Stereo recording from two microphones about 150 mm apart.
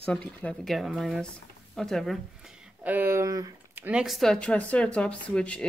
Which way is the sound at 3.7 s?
10° right (ahead or behind).